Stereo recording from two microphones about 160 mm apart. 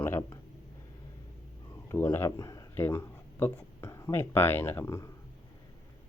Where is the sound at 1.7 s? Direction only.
20° left (ahead or behind).